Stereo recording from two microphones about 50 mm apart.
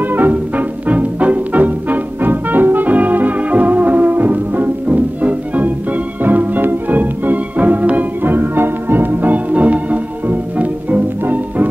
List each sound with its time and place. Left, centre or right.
0.0 s music: right